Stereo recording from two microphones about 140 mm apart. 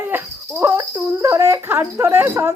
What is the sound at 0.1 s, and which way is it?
Cricket, 15° right (ahead or behind).